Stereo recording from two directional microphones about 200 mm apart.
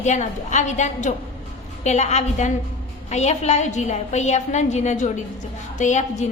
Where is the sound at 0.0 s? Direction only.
35° left (ahead or behind).